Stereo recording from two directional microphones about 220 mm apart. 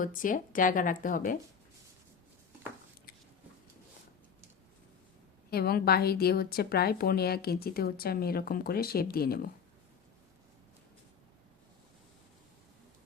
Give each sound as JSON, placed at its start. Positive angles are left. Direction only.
{"t": 0.0, "sound": "speech", "side_deg": 35}
{"t": 5.5, "sound": "a woman's voice", "side_deg": 45}